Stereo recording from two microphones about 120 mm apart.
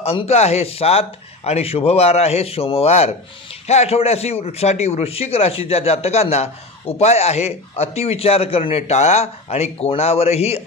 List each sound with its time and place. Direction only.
0.0 s a man's voice: 60° left (ahead or behind)